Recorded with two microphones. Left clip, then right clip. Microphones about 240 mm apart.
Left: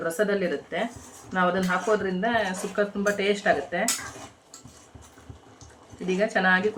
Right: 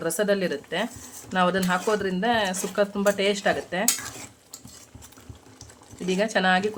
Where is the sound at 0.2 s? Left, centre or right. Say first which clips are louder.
Right 1 dB; right.